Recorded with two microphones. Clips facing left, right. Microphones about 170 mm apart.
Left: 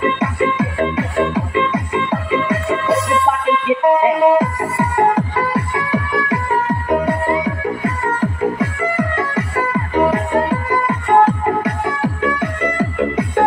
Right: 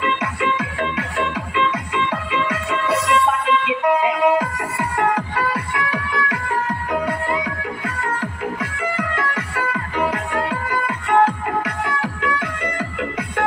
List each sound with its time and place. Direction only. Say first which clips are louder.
0.0 s music: left 5 dB; 25° left (ahead or behind)